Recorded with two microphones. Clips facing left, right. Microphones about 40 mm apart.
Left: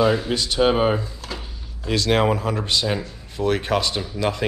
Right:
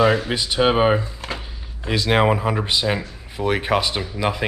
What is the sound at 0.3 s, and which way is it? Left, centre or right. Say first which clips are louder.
Speech: even; centre.